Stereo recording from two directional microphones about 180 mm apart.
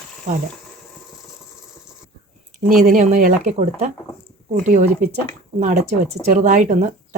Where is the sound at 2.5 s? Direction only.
50° right (ahead or behind).